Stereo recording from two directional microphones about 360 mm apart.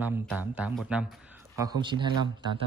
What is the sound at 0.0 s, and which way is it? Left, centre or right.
Speech, centre.